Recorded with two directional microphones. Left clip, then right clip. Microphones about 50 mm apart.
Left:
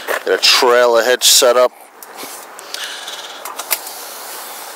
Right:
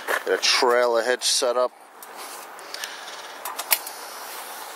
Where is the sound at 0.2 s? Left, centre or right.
Left.